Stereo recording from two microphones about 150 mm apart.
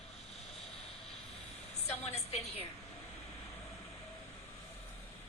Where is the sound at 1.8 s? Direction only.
45° left (ahead or behind).